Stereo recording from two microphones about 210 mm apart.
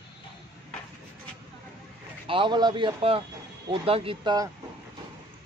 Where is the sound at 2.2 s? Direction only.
25° right (ahead or behind).